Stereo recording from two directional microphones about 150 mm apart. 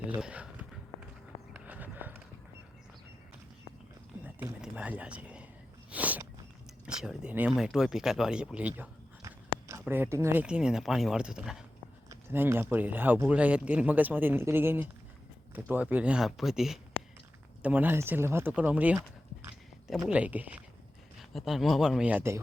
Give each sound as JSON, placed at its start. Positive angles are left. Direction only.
{"t": 0.2, "sound": "speech", "side_deg": -5}
{"t": 1.5, "sound": "horse", "side_deg": -10}
{"t": 4.2, "sound": "a sound", "side_deg": -10}
{"t": 6.8, "sound": "speech", "side_deg": -5}
{"t": 9.2, "sound": "a sound", "side_deg": -20}
{"t": 9.8, "sound": "speech", "side_deg": -15}
{"t": 10.4, "sound": "speech", "side_deg": -5}
{"t": 12.0, "sound": "speech", "side_deg": -15}